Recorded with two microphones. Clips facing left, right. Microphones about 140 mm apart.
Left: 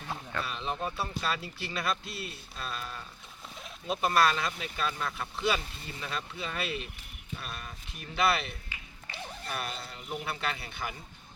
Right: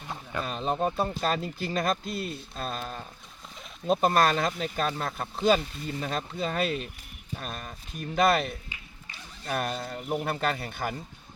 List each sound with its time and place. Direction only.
0.4 s speech: 40° right (ahead or behind)